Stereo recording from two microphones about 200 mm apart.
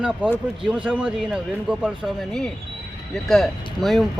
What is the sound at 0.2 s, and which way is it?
Speech, 5° right (ahead or behind).